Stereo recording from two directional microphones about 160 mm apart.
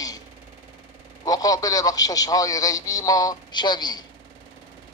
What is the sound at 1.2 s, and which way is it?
A man's voice, 20° left (ahead or behind).